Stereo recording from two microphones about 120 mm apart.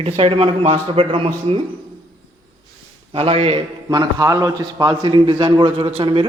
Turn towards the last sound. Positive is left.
turn(degrees=-45)  # may be behind; listen again after turning